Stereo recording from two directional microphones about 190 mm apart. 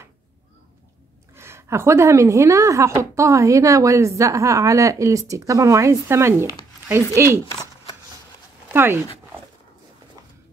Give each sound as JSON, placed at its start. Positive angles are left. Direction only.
{"t": 1.3, "sound": "a woman's voice", "side_deg": -15}
{"t": 8.7, "sound": "speech", "side_deg": -10}